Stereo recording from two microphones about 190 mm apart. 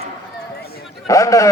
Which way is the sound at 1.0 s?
15° left (ahead or behind).